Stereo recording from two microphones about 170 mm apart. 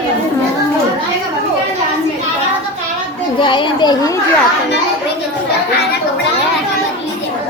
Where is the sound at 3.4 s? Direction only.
30° left (ahead or behind).